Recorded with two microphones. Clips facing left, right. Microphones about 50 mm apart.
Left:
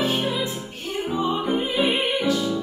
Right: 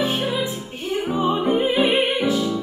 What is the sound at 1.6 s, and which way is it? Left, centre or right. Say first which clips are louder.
Music: right 4 dB; right.